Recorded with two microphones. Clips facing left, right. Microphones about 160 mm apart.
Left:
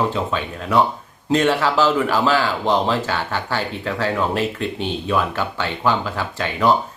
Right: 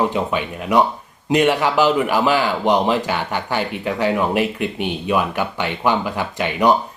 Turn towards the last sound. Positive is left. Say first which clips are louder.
# right 2 dB
turn(degrees=-15)  # may be behind; listen again after turning